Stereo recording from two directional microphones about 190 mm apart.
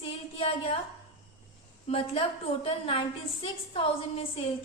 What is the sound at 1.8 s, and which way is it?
A woman's voice, 30° left (ahead or behind).